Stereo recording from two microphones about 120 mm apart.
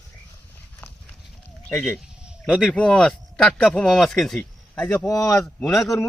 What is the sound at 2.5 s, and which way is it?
Speech, 5° left (ahead or behind).